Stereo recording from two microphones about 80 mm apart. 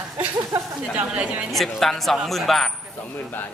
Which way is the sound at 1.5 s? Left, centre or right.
Centre.